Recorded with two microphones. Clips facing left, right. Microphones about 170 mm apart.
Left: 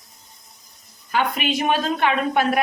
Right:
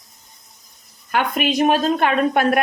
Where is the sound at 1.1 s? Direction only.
45° right (ahead or behind).